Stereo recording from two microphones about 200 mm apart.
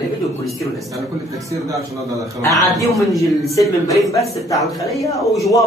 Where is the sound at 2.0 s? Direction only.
15° right (ahead or behind).